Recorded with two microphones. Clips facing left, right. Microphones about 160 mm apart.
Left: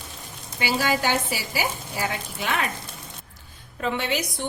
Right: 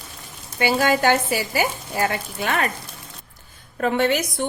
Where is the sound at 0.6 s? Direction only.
55° right (ahead or behind).